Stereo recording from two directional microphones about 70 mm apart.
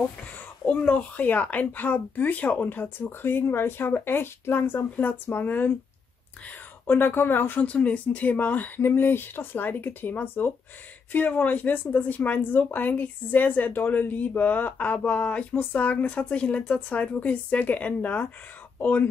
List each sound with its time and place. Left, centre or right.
0.7 s speech: centre
6.9 s speech: left
7.6 s speech: centre